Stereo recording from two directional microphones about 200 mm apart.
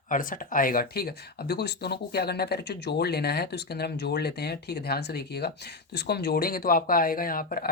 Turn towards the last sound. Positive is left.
turn(degrees=45)  # may be behind; listen again after turning